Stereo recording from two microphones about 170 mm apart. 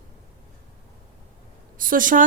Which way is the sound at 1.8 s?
55° right (ahead or behind).